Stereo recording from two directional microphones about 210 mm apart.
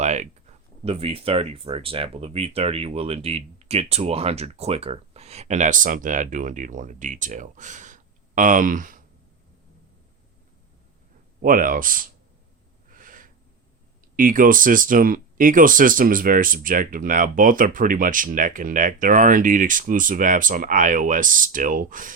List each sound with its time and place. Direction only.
0.0 s speech: 35° right (ahead or behind)
11.4 s speech: 40° right (ahead or behind)
12.9 s snort: 40° right (ahead or behind)
14.2 s speech: 40° right (ahead or behind)